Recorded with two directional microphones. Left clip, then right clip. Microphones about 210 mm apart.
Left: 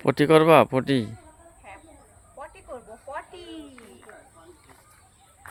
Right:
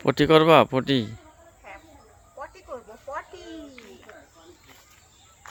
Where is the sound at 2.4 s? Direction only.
50° left (ahead or behind).